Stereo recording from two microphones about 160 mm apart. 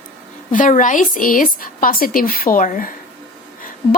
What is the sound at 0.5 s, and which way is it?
A woman's voice, 55° left (ahead or behind).